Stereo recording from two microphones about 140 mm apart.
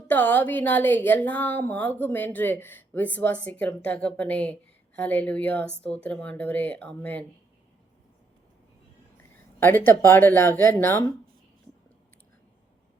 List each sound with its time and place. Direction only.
0.1 s a woman's voice: 10° left (ahead or behind)
9.6 s a woman's voice: 15° left (ahead or behind)